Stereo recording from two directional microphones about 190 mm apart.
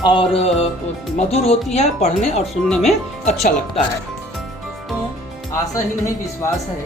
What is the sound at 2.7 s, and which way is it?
Speech, centre (ahead or behind).